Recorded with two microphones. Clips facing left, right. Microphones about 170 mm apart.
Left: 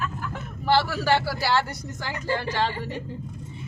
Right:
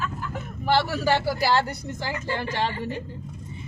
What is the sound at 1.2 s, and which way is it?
Speech, 20° right (ahead or behind).